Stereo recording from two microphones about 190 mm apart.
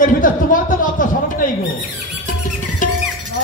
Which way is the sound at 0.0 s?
45° left (ahead or behind).